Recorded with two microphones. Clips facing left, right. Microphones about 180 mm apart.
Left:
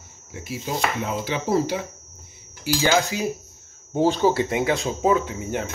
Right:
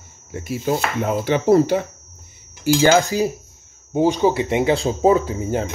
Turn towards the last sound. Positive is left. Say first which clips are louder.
# right 5 dB
turn(degrees=-30)  # may be behind; listen again after turning